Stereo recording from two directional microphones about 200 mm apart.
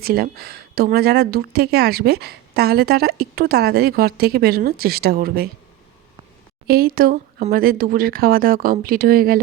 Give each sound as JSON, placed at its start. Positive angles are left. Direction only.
{"t": 0.0, "sound": "a woman's voice", "side_deg": -50}
{"t": 6.7, "sound": "a woman's voice", "side_deg": -50}